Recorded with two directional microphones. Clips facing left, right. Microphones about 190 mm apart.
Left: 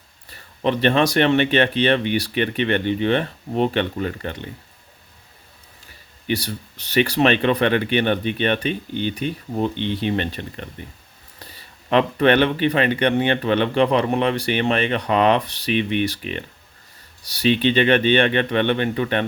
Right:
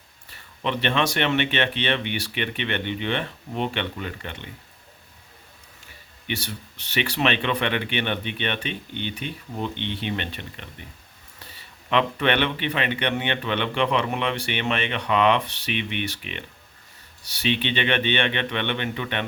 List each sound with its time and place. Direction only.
0.3 s speech: 40° left (ahead or behind)
6.2 s speech: 40° left (ahead or behind)